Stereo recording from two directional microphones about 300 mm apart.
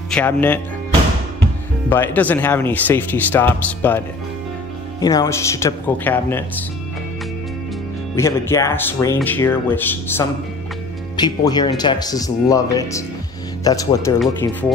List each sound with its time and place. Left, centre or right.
0.1 s speech: centre
1.9 s speech: centre
5.0 s speech: centre
8.2 s speech: centre